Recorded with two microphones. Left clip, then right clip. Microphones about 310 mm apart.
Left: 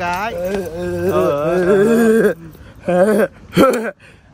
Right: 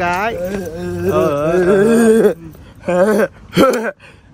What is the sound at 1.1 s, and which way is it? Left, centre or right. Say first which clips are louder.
Speech: right 2 dB; right.